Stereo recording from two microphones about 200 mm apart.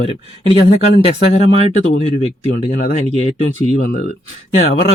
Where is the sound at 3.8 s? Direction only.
45° left (ahead or behind).